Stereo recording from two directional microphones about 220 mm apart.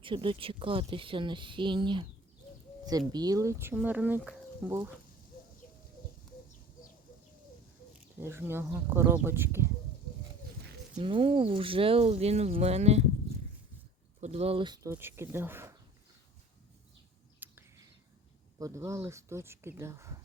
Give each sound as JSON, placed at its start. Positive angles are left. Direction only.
{"t": 0.0, "sound": "speech", "side_deg": -25}
{"t": 3.1, "sound": "speech", "side_deg": -15}
{"t": 8.2, "sound": "speech", "side_deg": -10}
{"t": 10.9, "sound": "speech", "side_deg": -25}
{"t": 14.2, "sound": "speech", "side_deg": -30}
{"t": 17.4, "sound": "a sound", "side_deg": -10}
{"t": 18.6, "sound": "speech", "side_deg": -15}